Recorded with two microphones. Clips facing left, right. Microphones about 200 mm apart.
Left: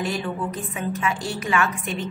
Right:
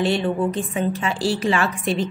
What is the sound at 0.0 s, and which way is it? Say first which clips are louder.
A woman's voice: right 6 dB; 30° right (ahead or behind).